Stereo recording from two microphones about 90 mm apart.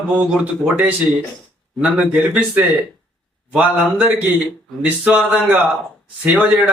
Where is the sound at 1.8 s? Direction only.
15° right (ahead or behind).